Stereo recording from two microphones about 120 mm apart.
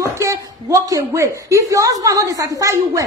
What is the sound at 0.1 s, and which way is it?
A man's voice, 25° right (ahead or behind).